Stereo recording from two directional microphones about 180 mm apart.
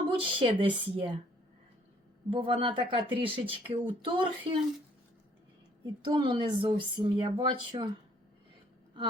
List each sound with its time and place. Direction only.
0.1 s speech: 30° right (ahead or behind)
2.3 s speech: 30° right (ahead or behind)
5.8 s speech: 25° right (ahead or behind)